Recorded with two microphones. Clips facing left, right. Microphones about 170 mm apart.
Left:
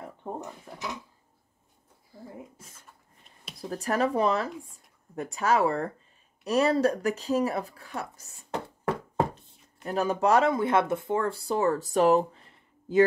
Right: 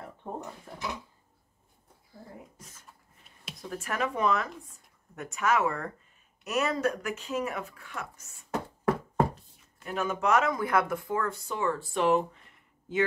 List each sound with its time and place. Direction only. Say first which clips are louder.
0.7 s speech: left 1 dB; 10° left (ahead or behind)
3.5 s speech: left 6 dB; 35° left (ahead or behind)
8.8 s a sound: right 1 dB; 20° left (ahead or behind)
9.8 s speech: left 4 dB; 35° left (ahead or behind)